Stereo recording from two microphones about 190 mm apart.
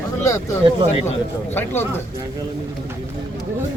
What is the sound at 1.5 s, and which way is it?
Speech, 10° left (ahead or behind).